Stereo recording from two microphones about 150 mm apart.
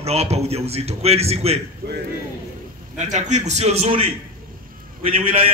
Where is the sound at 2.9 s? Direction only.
50° right (ahead or behind).